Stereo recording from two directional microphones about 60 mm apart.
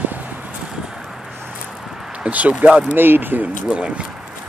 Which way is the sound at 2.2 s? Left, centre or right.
Right.